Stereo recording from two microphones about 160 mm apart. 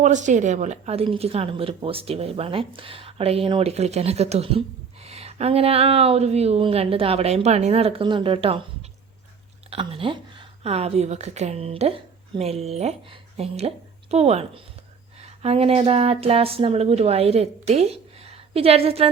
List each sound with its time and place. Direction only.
0.0 s a woman's voice: 50° right (ahead or behind)
9.6 s a woman's voice: 35° right (ahead or behind)